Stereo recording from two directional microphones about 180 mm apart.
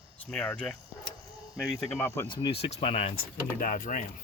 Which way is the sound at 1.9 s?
15° left (ahead or behind).